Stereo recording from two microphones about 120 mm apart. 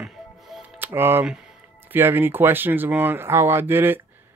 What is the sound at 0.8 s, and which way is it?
Speech, 15° right (ahead or behind).